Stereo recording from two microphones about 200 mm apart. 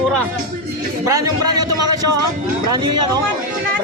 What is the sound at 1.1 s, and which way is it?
Speech, 15° right (ahead or behind).